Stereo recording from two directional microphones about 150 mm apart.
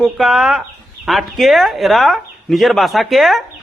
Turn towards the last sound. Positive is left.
turn(degrees=0)  # may be behind; listen again after turning